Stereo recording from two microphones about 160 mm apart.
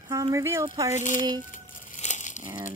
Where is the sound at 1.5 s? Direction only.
55° left (ahead or behind).